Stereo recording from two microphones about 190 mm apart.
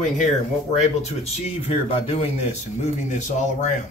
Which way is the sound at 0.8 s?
35° left (ahead or behind).